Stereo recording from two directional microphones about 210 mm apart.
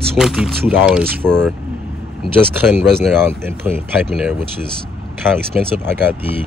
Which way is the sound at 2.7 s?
10° right (ahead or behind).